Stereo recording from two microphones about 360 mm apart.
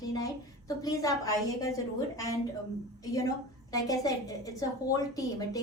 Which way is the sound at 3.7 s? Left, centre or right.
Centre.